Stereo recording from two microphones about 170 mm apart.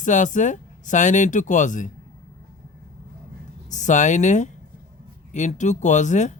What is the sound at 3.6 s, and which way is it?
Speech, 45° left (ahead or behind).